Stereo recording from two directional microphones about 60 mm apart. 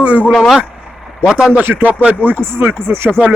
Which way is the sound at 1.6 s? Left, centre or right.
Right.